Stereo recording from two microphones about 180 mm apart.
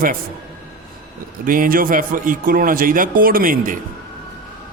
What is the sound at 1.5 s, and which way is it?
Speech, 50° right (ahead or behind).